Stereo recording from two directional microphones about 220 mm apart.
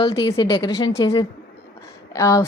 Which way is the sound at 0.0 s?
20° left (ahead or behind).